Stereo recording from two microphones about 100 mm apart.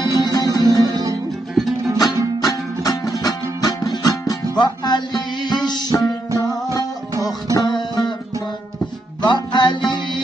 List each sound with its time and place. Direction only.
0.0 s music: 45° left (ahead or behind)
2.0 s music: 40° left (ahead or behind)
9.2 s music: 45° left (ahead or behind)